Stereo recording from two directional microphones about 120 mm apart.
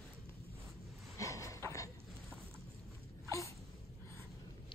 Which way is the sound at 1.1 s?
25° left (ahead or behind).